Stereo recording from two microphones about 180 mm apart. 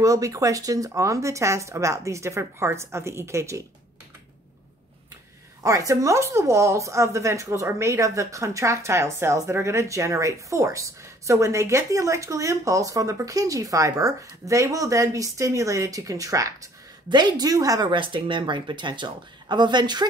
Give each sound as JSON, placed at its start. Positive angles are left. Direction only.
{"t": 0.0, "sound": "speech", "side_deg": -20}
{"t": 5.6, "sound": "speech", "side_deg": -20}